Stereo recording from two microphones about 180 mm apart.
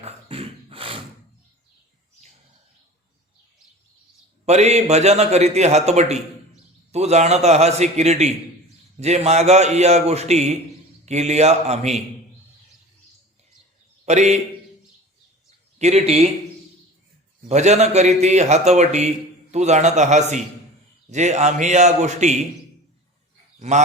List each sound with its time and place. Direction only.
0.0 s beatboxing: 30° right (ahead or behind)
4.4 s a man's voice: 40° right (ahead or behind)
14.0 s a man's voice: 40° right (ahead or behind)
15.4 s a sound: 40° right (ahead or behind)
17.5 s a man's voice: 40° right (ahead or behind)
23.6 s speech: 40° right (ahead or behind)